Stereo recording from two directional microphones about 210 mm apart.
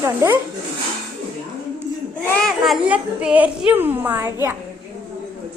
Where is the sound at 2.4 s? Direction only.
Centre (ahead or behind).